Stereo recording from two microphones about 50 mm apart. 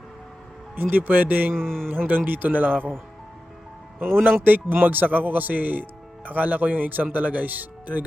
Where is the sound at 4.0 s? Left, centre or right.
Right.